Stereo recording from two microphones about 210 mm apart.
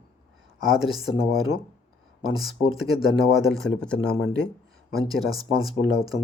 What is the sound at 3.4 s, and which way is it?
Speech, centre (ahead or behind).